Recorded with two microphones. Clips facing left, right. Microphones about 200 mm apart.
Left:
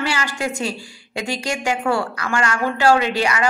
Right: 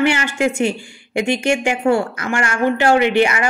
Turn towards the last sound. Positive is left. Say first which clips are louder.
# right 5 dB
turn(degrees=-25)  # may be behind; listen again after turning